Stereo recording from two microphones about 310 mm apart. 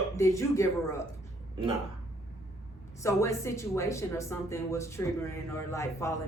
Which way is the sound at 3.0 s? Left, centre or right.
Centre.